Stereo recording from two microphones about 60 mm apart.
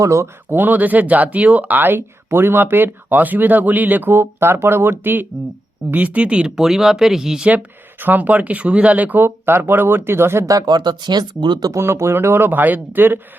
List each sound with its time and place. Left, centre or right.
0.0 s speech: right
0.5 s speech: right
5.9 s speech: right
6.6 s speech: centre
7.4 s speech: right
10.7 s speech: right
11.8 s speech: right